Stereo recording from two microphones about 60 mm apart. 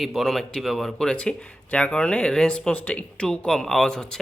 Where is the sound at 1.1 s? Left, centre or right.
Centre.